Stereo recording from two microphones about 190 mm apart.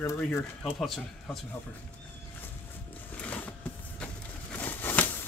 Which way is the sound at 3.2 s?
10° left (ahead or behind).